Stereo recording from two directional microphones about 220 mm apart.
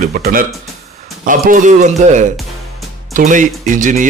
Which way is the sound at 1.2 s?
40° right (ahead or behind).